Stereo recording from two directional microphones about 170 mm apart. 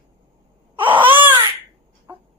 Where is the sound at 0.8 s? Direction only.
10° right (ahead or behind).